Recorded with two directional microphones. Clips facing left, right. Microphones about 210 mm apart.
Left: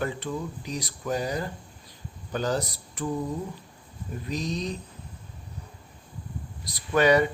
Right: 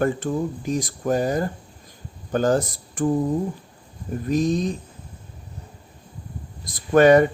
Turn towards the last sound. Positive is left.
turn(degrees=-50)  # may be behind; listen again after turning